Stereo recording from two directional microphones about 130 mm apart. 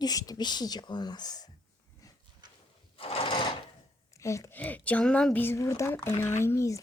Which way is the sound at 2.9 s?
45° left (ahead or behind).